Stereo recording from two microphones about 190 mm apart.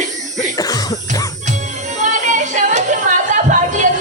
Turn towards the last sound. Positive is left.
turn(degrees=-40)  # may be behind; listen again after turning